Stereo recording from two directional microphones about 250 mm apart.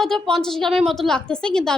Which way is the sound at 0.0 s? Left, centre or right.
Centre.